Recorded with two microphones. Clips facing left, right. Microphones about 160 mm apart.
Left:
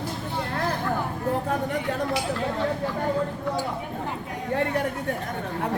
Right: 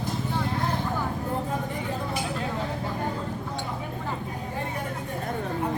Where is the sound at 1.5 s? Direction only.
75° left (ahead or behind).